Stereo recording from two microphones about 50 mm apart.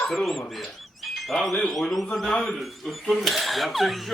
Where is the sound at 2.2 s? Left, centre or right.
Centre.